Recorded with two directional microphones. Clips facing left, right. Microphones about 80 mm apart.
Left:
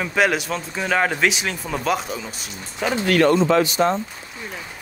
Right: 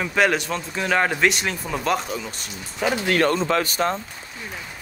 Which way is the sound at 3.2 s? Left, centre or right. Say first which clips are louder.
Left 6 dB; left.